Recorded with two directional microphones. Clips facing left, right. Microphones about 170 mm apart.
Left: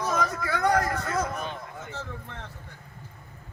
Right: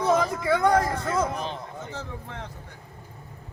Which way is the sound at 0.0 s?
30° right (ahead or behind).